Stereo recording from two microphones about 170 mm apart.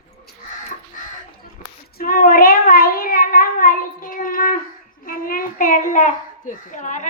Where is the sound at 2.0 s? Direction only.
55° left (ahead or behind).